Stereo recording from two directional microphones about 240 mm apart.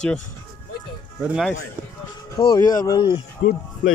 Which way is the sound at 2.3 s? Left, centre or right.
Centre.